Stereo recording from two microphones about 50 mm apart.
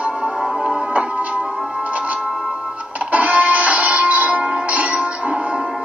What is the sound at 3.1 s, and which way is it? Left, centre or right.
Music, right.